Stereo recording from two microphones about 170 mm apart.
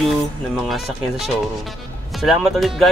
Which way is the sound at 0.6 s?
Centre (ahead or behind).